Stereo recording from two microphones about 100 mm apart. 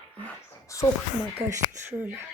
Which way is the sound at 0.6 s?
30° left (ahead or behind).